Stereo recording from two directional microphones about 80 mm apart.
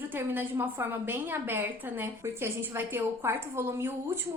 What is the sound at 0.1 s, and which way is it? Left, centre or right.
A woman's voice, right.